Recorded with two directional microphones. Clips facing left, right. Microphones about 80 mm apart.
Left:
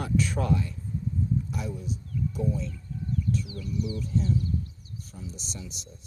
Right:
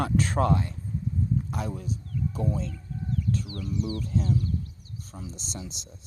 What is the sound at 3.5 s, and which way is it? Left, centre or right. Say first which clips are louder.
Speech: right 1 dB; right.